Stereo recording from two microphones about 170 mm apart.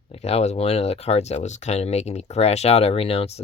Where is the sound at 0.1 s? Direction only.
40° left (ahead or behind).